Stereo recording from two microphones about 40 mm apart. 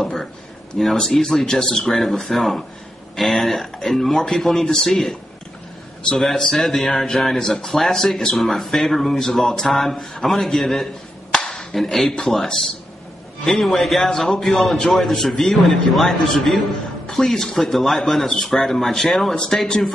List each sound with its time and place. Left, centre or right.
0.7 s a man's voice: centre
11.4 s clapping: centre
12.2 s a man's voice: centre
13.5 s a man's voice: centre
19.3 s a man's voice: centre